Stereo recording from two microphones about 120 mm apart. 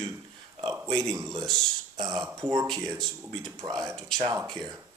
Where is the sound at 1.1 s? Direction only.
30° right (ahead or behind).